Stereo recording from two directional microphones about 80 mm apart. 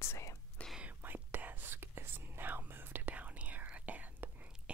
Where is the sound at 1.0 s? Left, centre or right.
Right.